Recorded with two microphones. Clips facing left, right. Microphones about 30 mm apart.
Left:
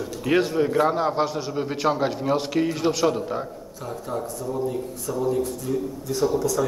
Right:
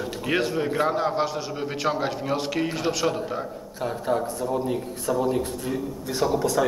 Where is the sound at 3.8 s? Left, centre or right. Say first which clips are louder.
Right 5 dB; right.